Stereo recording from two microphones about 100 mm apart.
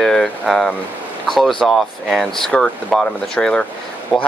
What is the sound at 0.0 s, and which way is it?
Speech, 5° left (ahead or behind).